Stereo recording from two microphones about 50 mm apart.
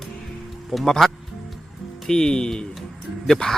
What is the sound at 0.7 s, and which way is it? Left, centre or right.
Speech, centre.